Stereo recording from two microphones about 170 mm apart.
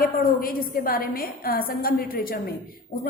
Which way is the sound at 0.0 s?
60° left (ahead or behind).